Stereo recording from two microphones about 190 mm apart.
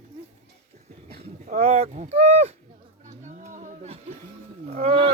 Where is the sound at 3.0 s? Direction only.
40° right (ahead or behind).